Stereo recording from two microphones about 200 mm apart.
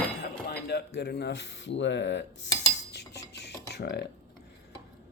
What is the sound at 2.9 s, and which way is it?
Cutlery, 60° left (ahead or behind).